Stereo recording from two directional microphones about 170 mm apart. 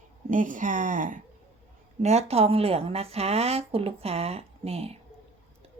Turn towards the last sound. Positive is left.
turn(degrees=-35)  # may be behind; listen again after turning